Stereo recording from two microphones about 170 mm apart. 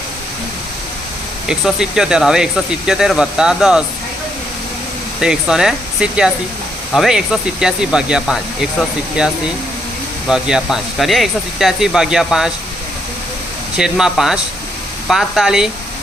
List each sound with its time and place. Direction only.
1.5 s speech: 5° right (ahead or behind)
5.2 s speech: 5° right (ahead or behind)
13.7 s speech: 5° right (ahead or behind)